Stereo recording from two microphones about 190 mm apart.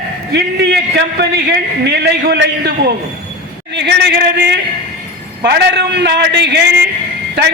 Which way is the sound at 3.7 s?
60° right (ahead or behind).